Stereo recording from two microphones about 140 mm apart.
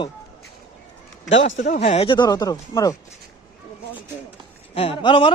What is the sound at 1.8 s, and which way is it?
Speech, 40° left (ahead or behind).